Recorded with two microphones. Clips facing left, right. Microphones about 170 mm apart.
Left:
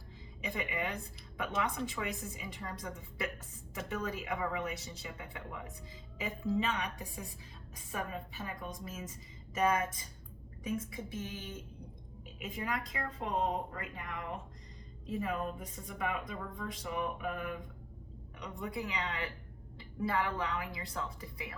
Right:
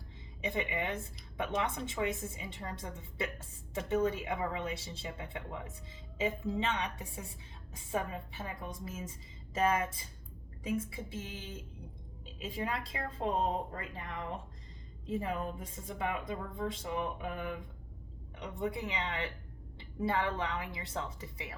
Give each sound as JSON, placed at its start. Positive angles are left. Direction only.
{"t": 0.4, "sound": "speech", "side_deg": -25}